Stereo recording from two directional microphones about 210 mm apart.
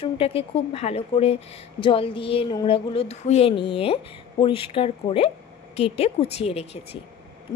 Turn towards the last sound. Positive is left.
turn(degrees=30)  # may be behind; listen again after turning